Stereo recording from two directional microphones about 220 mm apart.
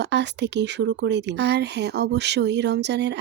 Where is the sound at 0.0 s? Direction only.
50° right (ahead or behind).